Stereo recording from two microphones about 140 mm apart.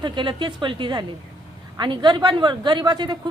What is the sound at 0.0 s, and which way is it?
A woman's voice, 35° right (ahead or behind).